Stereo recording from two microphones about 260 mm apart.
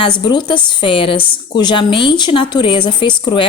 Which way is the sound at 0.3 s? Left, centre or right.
Centre.